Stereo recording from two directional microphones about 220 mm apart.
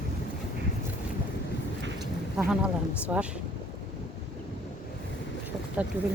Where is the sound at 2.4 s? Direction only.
5° right (ahead or behind).